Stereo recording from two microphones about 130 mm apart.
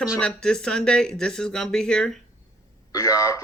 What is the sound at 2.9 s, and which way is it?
Speech, 25° left (ahead or behind).